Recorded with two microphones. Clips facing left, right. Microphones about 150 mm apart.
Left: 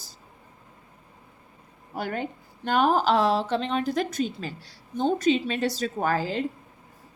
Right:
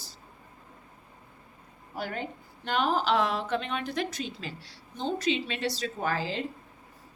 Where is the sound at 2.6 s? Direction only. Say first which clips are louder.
Left 5 dB; 45° left (ahead or behind).